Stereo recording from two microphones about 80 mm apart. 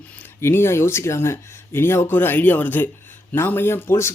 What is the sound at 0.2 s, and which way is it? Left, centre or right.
Speech, left.